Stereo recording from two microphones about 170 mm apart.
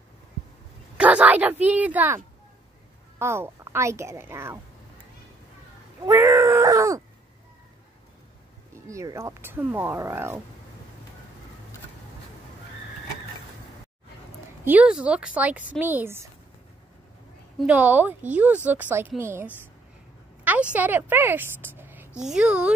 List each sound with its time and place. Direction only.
0.9 s a woman's voice: 5° right (ahead or behind)
6.0 s groan: 15° right (ahead or behind)
8.8 s a woman's voice: 15° right (ahead or behind)
14.6 s a woman's voice: 10° right (ahead or behind)
17.6 s a woman's voice: 10° right (ahead or behind)
20.7 s a woman's voice: 10° right (ahead or behind)